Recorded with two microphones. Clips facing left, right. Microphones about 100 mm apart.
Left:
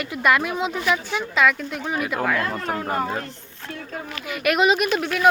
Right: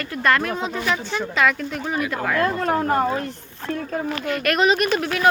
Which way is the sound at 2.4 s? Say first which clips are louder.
Right 5 dB; 35° right (ahead or behind).